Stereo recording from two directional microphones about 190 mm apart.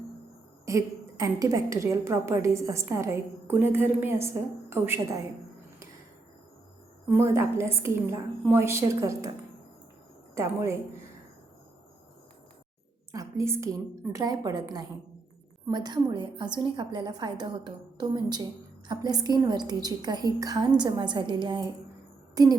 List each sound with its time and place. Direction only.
0.6 s a woman's voice: 15° right (ahead or behind)
7.1 s a woman's voice: 15° right (ahead or behind)
10.3 s a woman's voice: 15° right (ahead or behind)
13.1 s a woman's voice: 15° right (ahead or behind)